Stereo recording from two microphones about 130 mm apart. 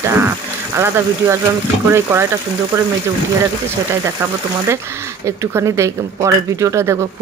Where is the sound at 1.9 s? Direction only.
20° right (ahead or behind).